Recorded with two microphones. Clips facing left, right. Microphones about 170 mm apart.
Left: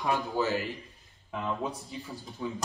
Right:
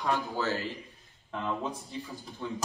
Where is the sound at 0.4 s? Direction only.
15° left (ahead or behind).